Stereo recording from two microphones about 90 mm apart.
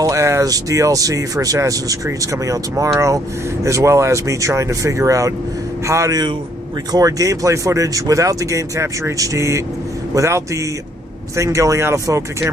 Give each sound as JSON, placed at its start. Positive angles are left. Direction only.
{"t": 0.0, "sound": "speech", "side_deg": -35}